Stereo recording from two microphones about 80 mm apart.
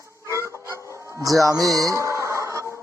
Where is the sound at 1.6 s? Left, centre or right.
Right.